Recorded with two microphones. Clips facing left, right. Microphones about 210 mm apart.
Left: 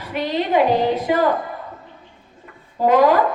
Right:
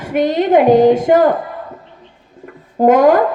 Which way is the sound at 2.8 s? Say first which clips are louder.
Right 5 dB; 50° right (ahead or behind).